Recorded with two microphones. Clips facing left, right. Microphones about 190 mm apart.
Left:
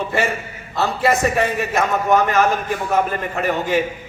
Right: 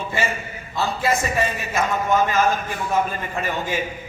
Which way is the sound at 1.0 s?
65° left (ahead or behind).